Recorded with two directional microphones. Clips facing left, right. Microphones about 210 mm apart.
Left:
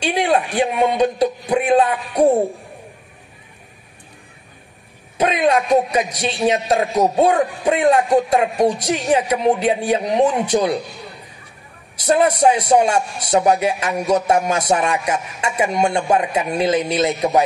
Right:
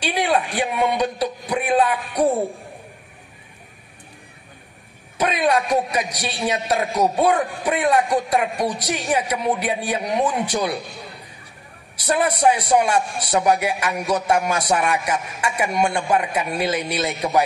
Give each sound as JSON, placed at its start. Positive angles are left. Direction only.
{"t": 0.0, "sound": "a man's voice", "side_deg": 25}
{"t": 5.2, "sound": "a man's voice", "side_deg": 25}
{"t": 12.1, "sound": "a man's voice", "side_deg": 25}